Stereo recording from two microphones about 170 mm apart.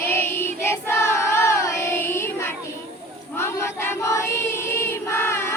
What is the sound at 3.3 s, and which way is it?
Choir, 15° left (ahead or behind).